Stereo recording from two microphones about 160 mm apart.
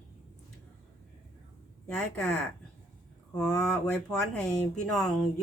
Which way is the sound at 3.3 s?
5° left (ahead or behind).